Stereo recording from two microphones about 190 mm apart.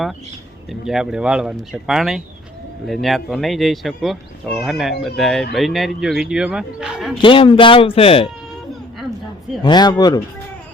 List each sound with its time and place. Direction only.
0.7 s speech: centre (ahead or behind)
7.2 s speech: 25° left (ahead or behind)
9.6 s speech: 20° left (ahead or behind)